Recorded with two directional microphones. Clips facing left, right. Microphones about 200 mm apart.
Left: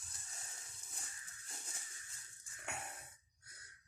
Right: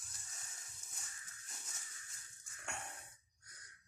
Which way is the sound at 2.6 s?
5° left (ahead or behind).